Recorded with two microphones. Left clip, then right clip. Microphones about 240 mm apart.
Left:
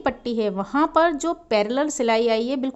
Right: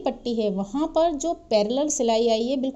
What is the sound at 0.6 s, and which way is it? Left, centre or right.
A woman's voice, left.